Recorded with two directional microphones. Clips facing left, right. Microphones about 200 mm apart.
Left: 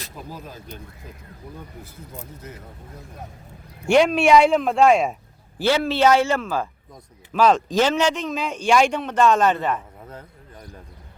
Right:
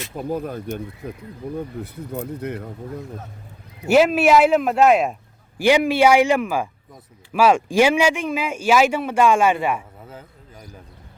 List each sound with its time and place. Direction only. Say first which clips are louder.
0.2 s speech: right 13 dB; 55° right (ahead or behind)
3.8 s speech: right 1 dB; 5° right (ahead or behind)
5.5 s speech: right 4 dB; 15° right (ahead or behind)